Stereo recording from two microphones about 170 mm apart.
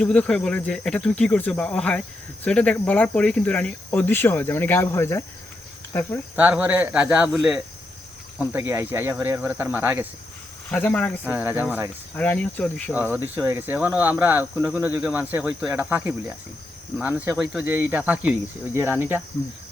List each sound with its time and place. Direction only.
0.0 s speech: 5° left (ahead or behind)
6.3 s speech: 10° right (ahead or behind)
10.7 s speech: 10° left (ahead or behind)
11.3 s speech: 10° right (ahead or behind)
12.1 s speech: 10° left (ahead or behind)
12.9 s speech: 10° right (ahead or behind)